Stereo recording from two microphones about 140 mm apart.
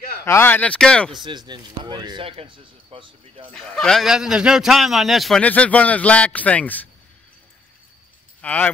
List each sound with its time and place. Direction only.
0.2 s speech: 15° left (ahead or behind)
1.2 s speech: 35° right (ahead or behind)
3.5 s a man's voice: 5° left (ahead or behind)
8.4 s speech: 10° left (ahead or behind)